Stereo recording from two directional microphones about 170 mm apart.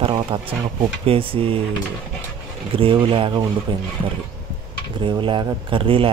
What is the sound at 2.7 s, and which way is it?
Speech, 30° right (ahead or behind).